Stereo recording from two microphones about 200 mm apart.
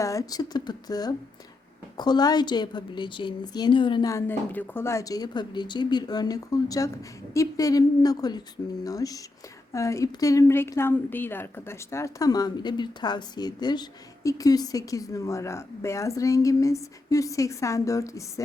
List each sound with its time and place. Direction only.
0.0 s a woman's voice: 15° left (ahead or behind)